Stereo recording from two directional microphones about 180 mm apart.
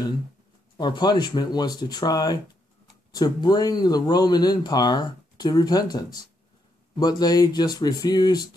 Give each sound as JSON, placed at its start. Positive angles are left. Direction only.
{"t": 0.7, "sound": "speech", "side_deg": 25}